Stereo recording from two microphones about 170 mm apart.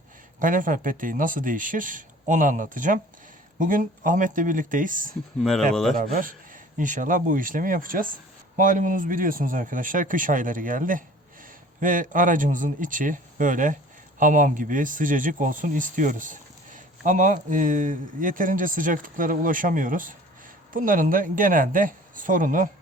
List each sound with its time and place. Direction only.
0.3 s speech: 50° right (ahead or behind)
5.4 s speech: centre (ahead or behind)
6.0 s speech: 55° right (ahead or behind)